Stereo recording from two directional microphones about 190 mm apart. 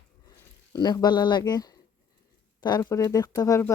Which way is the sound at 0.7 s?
20° left (ahead or behind).